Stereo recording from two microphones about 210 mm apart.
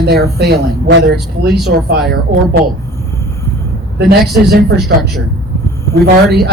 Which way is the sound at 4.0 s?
50° right (ahead or behind).